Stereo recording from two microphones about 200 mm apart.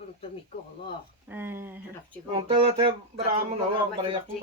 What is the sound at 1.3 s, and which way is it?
Speech, 10° right (ahead or behind).